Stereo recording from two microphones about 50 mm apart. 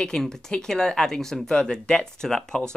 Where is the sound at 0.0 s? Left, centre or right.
Centre.